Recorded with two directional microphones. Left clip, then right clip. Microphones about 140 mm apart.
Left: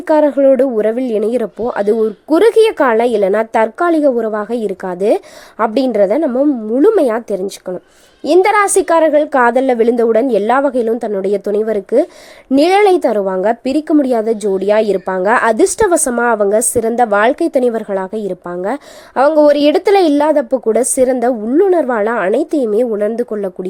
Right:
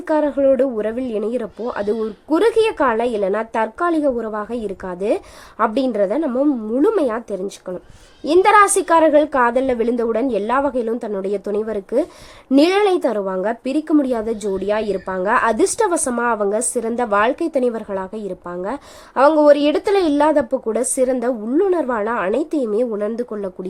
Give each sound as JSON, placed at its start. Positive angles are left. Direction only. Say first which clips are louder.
{"t": 0.1, "sound": "speech", "louder": "left 6 dB", "side_deg": 35}